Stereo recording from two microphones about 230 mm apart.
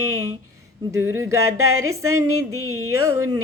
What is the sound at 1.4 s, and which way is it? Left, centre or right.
Music, right.